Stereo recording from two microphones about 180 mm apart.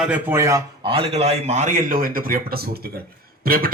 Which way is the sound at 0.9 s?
35° right (ahead or behind).